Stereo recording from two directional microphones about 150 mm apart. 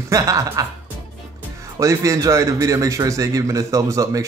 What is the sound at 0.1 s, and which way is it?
Speech, 20° right (ahead or behind).